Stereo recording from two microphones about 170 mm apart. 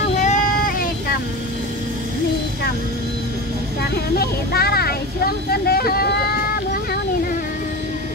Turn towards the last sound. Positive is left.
turn(degrees=65)  # may be behind; listen again after turning